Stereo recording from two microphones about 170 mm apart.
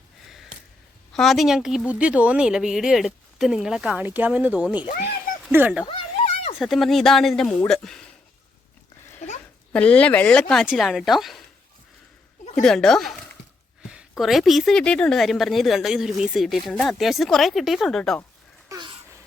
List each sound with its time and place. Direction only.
1.1 s speech: centre (ahead or behind)
5.9 s a sound: 35° left (ahead or behind)
6.6 s speech: centre (ahead or behind)
9.7 s speech: 5° left (ahead or behind)
12.6 s speech: 5° left (ahead or behind)
18.7 s a sound: 25° right (ahead or behind)